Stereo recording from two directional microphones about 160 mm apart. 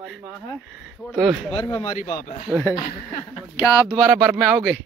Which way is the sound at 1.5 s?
35° left (ahead or behind).